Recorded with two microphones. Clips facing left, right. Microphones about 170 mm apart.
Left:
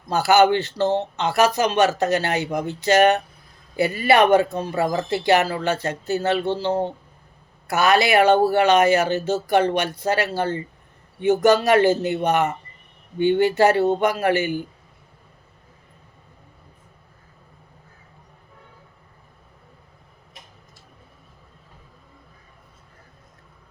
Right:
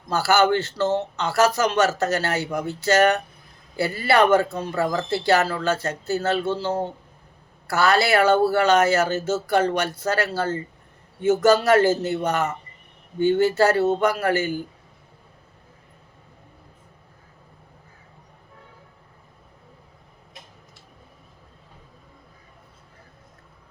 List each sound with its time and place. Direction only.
0.1 s speech: 15° left (ahead or behind)